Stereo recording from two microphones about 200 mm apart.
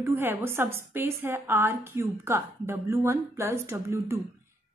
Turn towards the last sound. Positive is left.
turn(degrees=-15)  # may be behind; listen again after turning